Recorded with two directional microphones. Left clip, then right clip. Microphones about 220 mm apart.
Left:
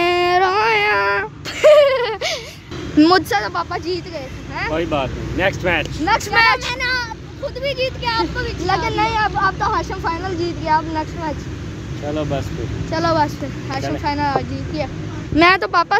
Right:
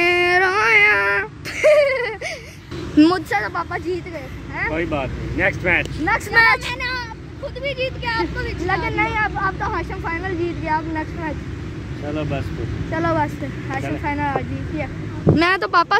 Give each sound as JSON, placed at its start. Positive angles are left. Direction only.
{"t": 0.0, "sound": "a sound", "side_deg": 0}
{"t": 3.3, "sound": "speech", "side_deg": 5}
{"t": 4.7, "sound": "speech", "side_deg": 15}
{"t": 6.0, "sound": "speech", "side_deg": -10}
{"t": 6.6, "sound": "vehicle", "side_deg": 30}
{"t": 7.6, "sound": "speech", "side_deg": 25}
{"t": 12.1, "sound": "speech", "side_deg": 20}
{"t": 12.9, "sound": "speech", "side_deg": 0}